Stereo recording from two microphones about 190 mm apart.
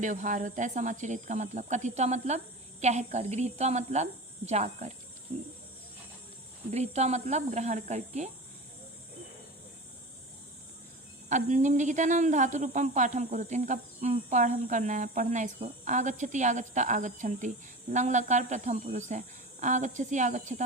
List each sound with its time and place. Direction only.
0.0 s speech: 40° right (ahead or behind)
6.7 s speech: 35° right (ahead or behind)
11.3 s speech: 40° right (ahead or behind)